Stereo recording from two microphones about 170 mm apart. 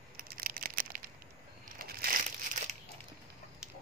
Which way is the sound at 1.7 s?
60° right (ahead or behind).